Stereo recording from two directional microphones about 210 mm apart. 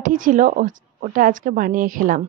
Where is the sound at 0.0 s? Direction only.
40° right (ahead or behind).